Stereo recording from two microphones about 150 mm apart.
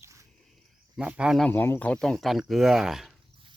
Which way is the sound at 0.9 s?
10° right (ahead or behind).